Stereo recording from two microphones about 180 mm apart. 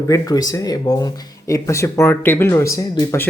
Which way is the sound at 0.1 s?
20° left (ahead or behind).